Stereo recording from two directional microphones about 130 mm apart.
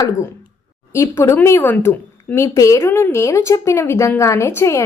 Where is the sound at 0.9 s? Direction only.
20° left (ahead or behind).